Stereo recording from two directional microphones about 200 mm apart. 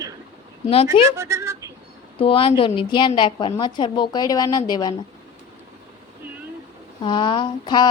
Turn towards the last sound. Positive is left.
turn(degrees=25)  # may be behind; listen again after turning